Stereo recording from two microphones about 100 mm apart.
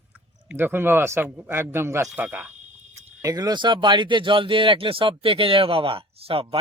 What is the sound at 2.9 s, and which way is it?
Speech, 35° right (ahead or behind).